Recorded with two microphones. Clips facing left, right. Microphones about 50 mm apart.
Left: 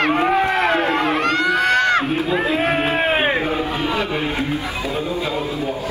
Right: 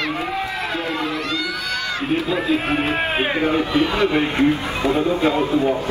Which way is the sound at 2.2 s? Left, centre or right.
Left.